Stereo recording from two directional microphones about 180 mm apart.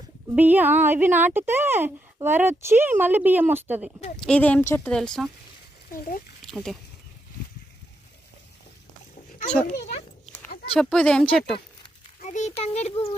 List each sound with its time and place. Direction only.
0.3 s a woman's voice: 10° right (ahead or behind)
4.2 s speech: 5° left (ahead or behind)
5.9 s speech: 50° left (ahead or behind)
6.4 s a sound: centre (ahead or behind)
10.8 s speech: 5° left (ahead or behind)
12.2 s a child's voice: 40° left (ahead or behind)